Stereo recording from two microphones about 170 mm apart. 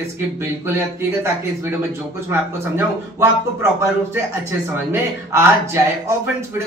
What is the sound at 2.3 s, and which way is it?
Speech, 15° right (ahead or behind).